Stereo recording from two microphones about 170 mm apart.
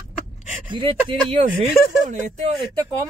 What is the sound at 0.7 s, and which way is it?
Speech, 30° right (ahead or behind).